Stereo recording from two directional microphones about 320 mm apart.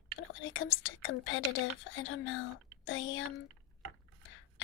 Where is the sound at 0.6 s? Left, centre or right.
Left.